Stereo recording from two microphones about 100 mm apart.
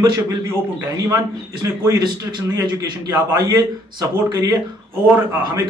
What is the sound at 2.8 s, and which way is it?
A man's voice, 35° right (ahead or behind).